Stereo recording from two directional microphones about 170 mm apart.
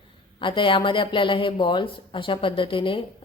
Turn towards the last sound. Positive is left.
turn(degrees=30)  # may be behind; listen again after turning